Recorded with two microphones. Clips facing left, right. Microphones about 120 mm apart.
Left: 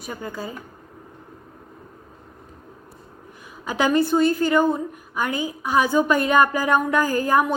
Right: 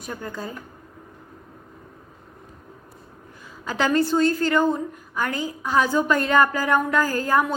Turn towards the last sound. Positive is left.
turn(degrees=15)  # may be behind; listen again after turning